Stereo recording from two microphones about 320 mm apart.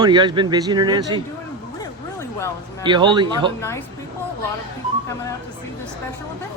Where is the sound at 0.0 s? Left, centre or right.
Centre.